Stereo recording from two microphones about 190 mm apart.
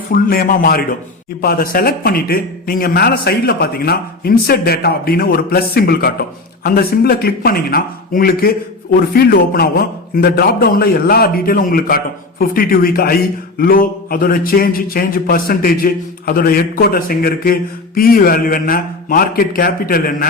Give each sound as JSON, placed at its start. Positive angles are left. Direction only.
{"t": 0.1, "sound": "a man's voice", "side_deg": 50}